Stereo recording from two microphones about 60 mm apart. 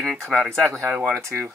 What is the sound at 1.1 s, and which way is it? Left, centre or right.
Speech, right.